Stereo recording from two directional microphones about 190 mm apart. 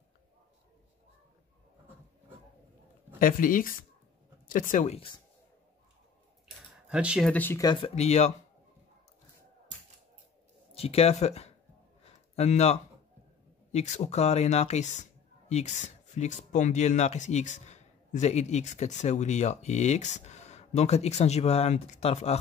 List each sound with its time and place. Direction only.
3.2 s speech: 45° left (ahead or behind); by 5.2 s 30° left (ahead or behind)
6.9 s speech: 5° right (ahead or behind)
7.2 s speech: 10° left (ahead or behind)
7.6 s speech: 30° left (ahead or behind)
10.7 s speech: 30° left (ahead or behind)